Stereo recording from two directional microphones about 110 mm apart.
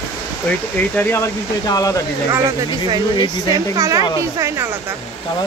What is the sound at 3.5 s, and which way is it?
Speech, 30° right (ahead or behind).